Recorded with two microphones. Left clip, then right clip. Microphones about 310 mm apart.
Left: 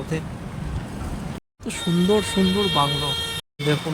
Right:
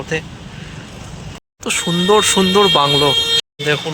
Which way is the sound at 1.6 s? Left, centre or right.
Centre.